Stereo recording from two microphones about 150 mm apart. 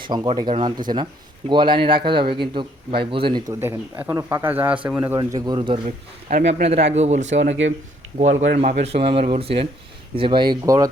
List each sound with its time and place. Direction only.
0.0 s a man's voice: 30° right (ahead or behind)
3.6 s a man's voice: 15° right (ahead or behind)
5.2 s a man's voice: 30° right (ahead or behind)
6.3 s a man's voice: 45° right (ahead or behind); by 10.8 s 25° right (ahead or behind)